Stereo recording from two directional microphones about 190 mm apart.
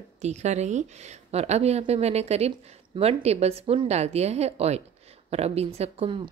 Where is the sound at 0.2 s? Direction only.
35° right (ahead or behind).